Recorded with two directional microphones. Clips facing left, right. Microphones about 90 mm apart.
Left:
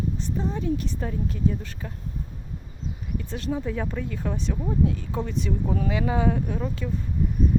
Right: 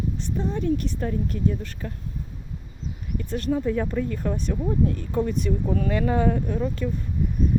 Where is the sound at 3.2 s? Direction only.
Centre (ahead or behind).